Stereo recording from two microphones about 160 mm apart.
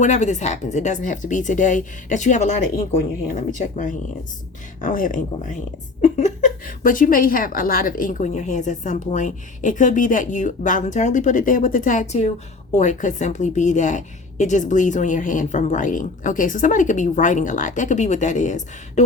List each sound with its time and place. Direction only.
0.0 s a woman's voice: 50° left (ahead or behind)